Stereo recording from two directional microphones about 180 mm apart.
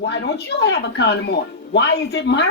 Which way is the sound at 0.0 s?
65° left (ahead or behind).